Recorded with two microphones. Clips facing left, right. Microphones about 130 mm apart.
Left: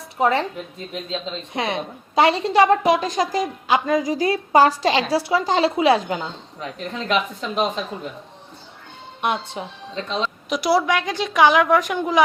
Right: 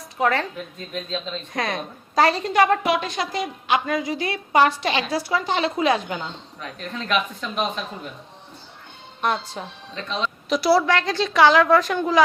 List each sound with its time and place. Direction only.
0.2 s a woman's voice: 25° left (ahead or behind); by 3.4 s 40° left (ahead or behind)
3.4 s a woman's voice: 25° left (ahead or behind)
9.2 s a woman's voice: 15° left (ahead or behind)
9.9 s speech: 30° left (ahead or behind)
10.5 s a woman's voice: 15° left (ahead or behind)